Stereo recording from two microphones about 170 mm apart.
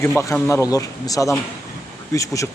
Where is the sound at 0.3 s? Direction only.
15° left (ahead or behind).